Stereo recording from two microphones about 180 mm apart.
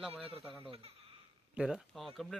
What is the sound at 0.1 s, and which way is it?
Speech, 30° right (ahead or behind).